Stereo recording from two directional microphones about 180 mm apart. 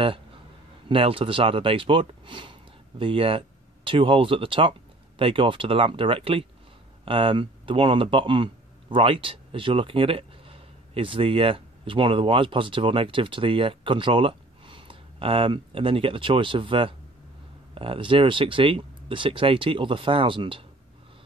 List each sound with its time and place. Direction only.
0.8 s speech: 30° right (ahead or behind)